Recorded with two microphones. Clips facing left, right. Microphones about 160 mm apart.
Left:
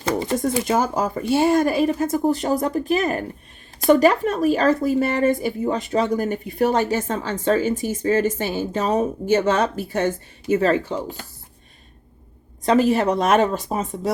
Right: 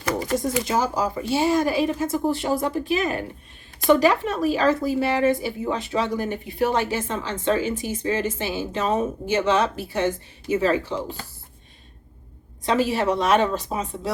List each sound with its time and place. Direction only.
0.0 s a sound: 25° left (ahead or behind)
0.4 s a woman's voice: 50° left (ahead or behind)
12.6 s a woman's voice: 45° left (ahead or behind)